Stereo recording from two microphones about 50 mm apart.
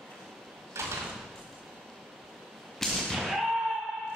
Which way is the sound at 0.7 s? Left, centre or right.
Right.